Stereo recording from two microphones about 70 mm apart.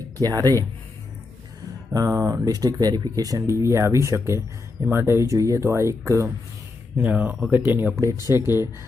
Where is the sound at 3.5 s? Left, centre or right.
Right.